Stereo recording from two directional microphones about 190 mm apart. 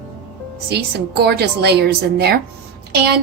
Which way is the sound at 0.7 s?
60° right (ahead or behind).